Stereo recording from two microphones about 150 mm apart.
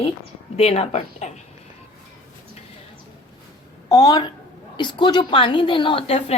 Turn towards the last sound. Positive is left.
turn(degrees=40)  # may be behind; listen again after turning